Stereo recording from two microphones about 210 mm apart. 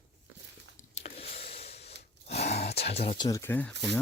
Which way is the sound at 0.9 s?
30° left (ahead or behind).